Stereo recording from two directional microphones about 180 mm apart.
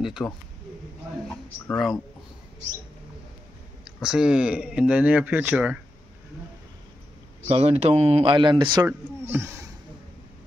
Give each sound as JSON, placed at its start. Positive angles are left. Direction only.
{"t": 0.0, "sound": "speech", "side_deg": 0}
{"t": 1.7, "sound": "speech", "side_deg": 0}
{"t": 4.0, "sound": "speech", "side_deg": -5}
{"t": 7.4, "sound": "speech", "side_deg": -35}
{"t": 9.3, "sound": "speech", "side_deg": -10}